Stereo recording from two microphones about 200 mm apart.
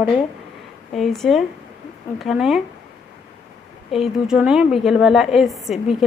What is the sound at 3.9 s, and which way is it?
A woman's voice, centre (ahead or behind).